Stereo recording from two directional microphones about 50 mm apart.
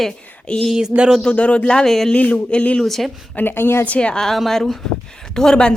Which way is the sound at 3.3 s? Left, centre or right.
Left.